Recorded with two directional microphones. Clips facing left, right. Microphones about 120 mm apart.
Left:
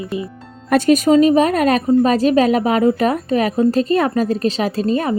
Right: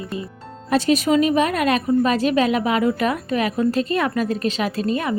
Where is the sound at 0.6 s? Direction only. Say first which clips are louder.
Left 5 dB; 50° left (ahead or behind).